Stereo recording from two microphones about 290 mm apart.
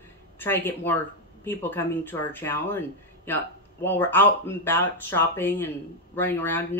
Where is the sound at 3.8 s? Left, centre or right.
Centre.